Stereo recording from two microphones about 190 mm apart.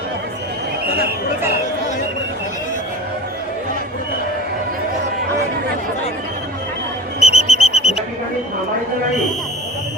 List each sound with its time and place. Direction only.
7.2 s whistle: 35° left (ahead or behind)